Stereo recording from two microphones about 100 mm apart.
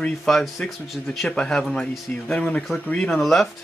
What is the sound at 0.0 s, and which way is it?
Speech, 5° left (ahead or behind).